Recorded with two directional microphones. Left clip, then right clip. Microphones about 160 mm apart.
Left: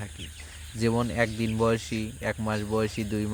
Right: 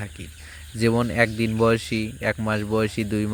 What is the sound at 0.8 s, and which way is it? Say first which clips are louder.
Speech: right 6 dB; 25° right (ahead or behind).